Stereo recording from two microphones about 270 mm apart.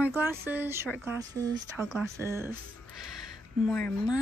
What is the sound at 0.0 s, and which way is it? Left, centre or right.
Speech, centre.